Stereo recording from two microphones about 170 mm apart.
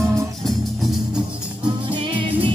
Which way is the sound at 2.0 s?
30° right (ahead or behind).